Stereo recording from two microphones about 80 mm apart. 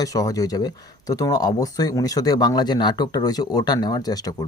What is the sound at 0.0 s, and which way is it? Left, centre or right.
Speech, left.